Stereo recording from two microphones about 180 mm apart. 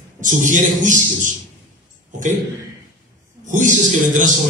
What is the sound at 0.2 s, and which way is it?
A man's voice, 45° right (ahead or behind).